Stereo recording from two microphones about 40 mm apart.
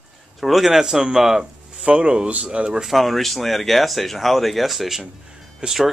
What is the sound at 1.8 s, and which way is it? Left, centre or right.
Speech, right.